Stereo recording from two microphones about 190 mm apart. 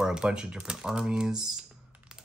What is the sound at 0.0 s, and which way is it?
Speech, 5° right (ahead or behind).